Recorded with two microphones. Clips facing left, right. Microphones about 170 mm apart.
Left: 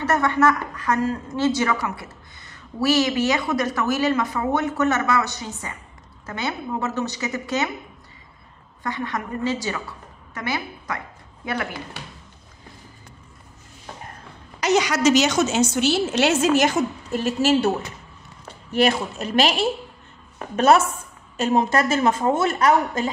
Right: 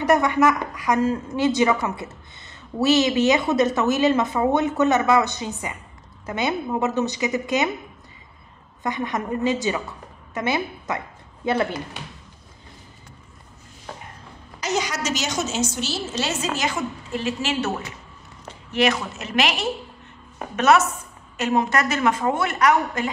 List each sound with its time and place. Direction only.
0.0 s a woman's voice: 15° right (ahead or behind)
8.8 s a woman's voice: 20° right (ahead or behind)
14.6 s a sound: 70° left (ahead or behind)
15.5 s a woman's voice: 60° left (ahead or behind)
16.6 s a woman's voice: 45° left (ahead or behind)
18.8 s a woman's voice: 30° left (ahead or behind)